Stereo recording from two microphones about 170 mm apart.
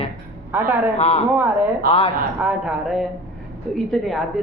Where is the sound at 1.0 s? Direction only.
40° left (ahead or behind).